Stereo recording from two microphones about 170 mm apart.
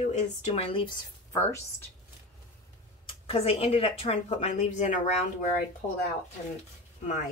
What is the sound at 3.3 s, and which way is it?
Speech, 35° left (ahead or behind).